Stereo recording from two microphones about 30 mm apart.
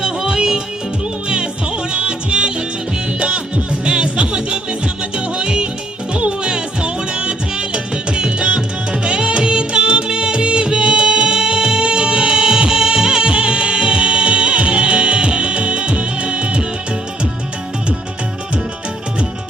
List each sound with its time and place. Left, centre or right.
0.3 s music: right
1.9 s music: right